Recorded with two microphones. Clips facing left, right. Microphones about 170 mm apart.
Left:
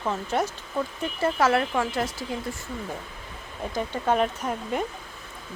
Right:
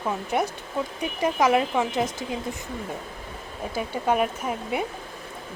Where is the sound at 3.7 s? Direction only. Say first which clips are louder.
Even; 10° right (ahead or behind).